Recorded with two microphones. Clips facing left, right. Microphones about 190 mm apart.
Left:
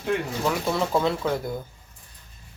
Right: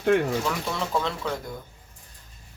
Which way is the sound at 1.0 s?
10° left (ahead or behind).